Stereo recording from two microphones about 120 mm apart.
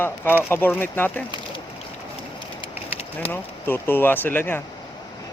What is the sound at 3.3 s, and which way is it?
Speech, 20° left (ahead or behind).